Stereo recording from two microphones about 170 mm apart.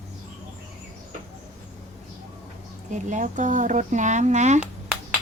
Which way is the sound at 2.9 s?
45° right (ahead or behind).